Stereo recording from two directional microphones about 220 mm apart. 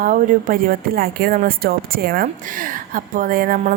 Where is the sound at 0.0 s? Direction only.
40° right (ahead or behind).